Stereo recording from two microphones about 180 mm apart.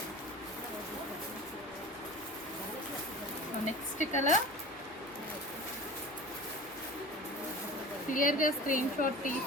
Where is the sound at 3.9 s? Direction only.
40° left (ahead or behind).